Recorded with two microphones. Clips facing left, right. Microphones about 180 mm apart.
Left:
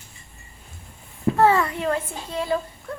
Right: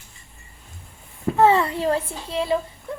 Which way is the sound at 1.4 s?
25° right (ahead or behind).